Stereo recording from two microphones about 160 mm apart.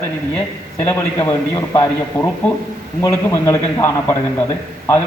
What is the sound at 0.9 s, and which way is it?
A man's voice, 20° left (ahead or behind).